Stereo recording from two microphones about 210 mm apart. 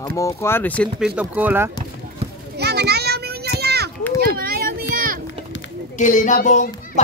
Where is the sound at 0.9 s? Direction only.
5° right (ahead or behind).